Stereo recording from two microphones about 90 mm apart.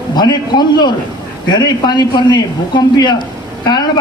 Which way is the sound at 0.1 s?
50° left (ahead or behind).